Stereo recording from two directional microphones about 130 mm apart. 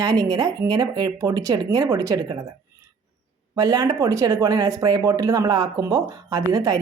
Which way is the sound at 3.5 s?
25° right (ahead or behind).